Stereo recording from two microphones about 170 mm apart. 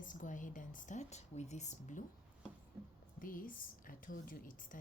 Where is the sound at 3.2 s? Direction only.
55° left (ahead or behind).